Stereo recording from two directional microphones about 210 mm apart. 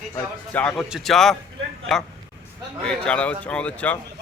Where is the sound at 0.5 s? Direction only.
5° left (ahead or behind).